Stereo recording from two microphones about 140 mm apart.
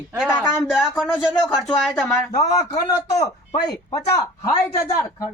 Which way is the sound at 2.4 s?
25° left (ahead or behind).